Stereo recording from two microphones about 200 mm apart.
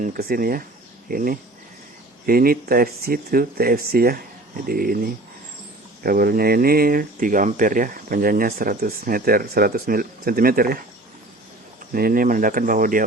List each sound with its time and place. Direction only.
0.0 s speech: 45° right (ahead or behind)
11.9 s speech: 45° right (ahead or behind)